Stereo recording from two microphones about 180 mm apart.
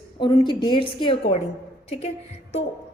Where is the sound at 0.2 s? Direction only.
25° left (ahead or behind).